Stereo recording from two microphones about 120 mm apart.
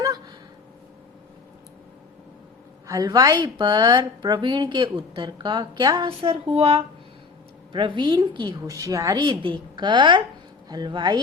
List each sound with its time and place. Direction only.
2.8 s a woman's voice: 30° right (ahead or behind)
6.1 s speech: 50° right (ahead or behind)
7.7 s a woman's voice: 45° right (ahead or behind)
8.6 s speech: 25° right (ahead or behind)
9.2 s a woman's voice: 40° right (ahead or behind)